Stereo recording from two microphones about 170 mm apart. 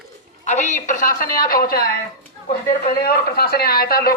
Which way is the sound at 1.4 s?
60° left (ahead or behind).